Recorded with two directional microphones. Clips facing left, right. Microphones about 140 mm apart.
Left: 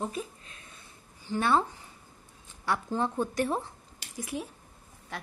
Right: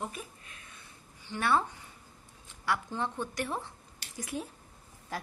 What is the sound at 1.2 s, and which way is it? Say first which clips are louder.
Speech: left 3 dB; 30° left (ahead or behind).